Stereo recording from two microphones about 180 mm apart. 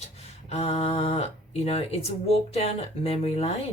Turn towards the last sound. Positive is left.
turn(degrees=35)  # may be behind; listen again after turning